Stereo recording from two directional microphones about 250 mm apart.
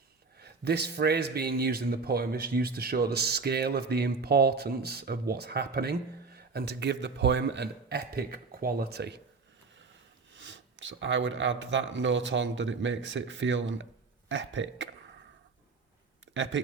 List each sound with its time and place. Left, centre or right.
0.3 s speech: right
10.3 s speech: right
16.3 s speech: right